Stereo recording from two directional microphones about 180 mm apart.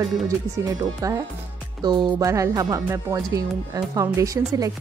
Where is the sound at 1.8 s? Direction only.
25° right (ahead or behind).